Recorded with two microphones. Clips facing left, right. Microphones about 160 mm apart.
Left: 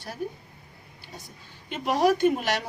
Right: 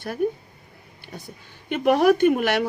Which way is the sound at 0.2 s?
60° right (ahead or behind).